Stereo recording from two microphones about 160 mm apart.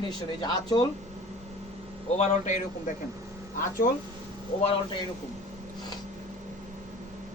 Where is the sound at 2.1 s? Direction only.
45° left (ahead or behind).